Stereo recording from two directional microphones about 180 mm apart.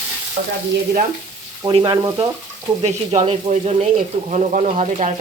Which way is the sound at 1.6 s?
20° right (ahead or behind).